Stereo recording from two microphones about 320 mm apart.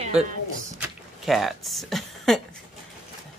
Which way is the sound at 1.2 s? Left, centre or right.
Centre.